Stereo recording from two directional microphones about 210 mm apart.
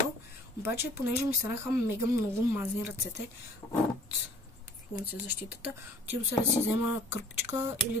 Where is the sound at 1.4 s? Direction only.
10° right (ahead or behind).